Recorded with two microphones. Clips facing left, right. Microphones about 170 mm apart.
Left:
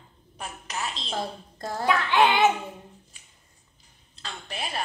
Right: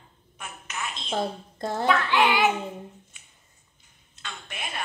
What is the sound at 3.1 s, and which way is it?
Finger snapping, 35° left (ahead or behind).